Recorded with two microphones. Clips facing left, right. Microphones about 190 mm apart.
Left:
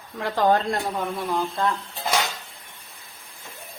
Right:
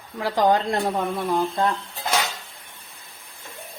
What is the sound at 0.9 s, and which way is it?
Speech, 35° right (ahead or behind).